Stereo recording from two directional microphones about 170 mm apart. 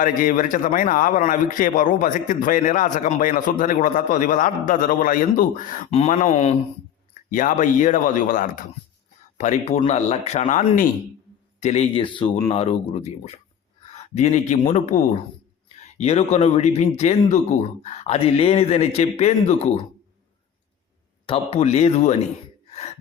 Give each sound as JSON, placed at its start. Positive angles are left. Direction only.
{"t": 0.0, "sound": "a man's voice", "side_deg": 55}
{"t": 21.2, "sound": "speech", "side_deg": 35}
{"t": 22.7, "sound": "gasp", "side_deg": 40}